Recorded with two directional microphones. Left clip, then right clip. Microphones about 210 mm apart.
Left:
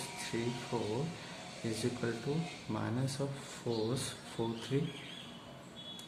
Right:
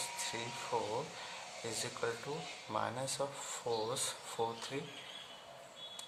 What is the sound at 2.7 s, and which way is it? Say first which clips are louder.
Speech: right 2 dB; 35° right (ahead or behind).